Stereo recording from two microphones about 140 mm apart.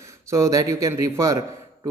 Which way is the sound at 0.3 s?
20° right (ahead or behind).